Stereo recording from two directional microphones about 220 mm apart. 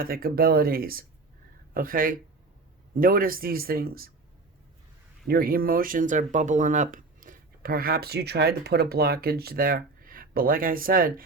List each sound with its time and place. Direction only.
0.0 s speech: 40° right (ahead or behind)
5.3 s speech: 40° right (ahead or behind)